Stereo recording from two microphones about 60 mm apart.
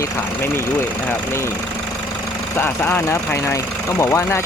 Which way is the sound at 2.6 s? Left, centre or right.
Left.